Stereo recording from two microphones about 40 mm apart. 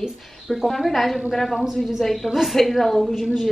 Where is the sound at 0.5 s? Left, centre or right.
Centre.